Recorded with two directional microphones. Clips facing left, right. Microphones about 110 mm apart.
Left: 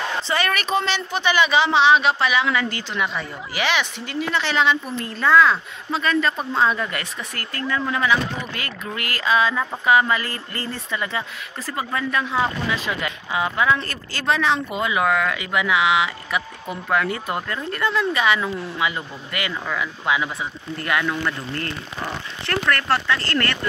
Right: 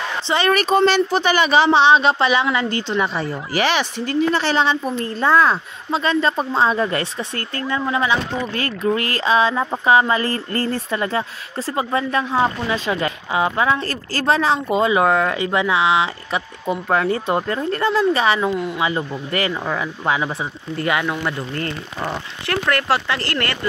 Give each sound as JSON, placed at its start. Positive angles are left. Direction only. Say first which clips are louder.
{"t": 0.3, "sound": "speech", "louder": "right 7 dB", "side_deg": -30}
{"t": 11.6, "sound": "speech", "louder": "right 5 dB", "side_deg": -25}
{"t": 20.8, "sound": "speech", "louder": "right 2 dB", "side_deg": -20}
{"t": 22.5, "sound": "speech", "louder": "right 2 dB", "side_deg": -10}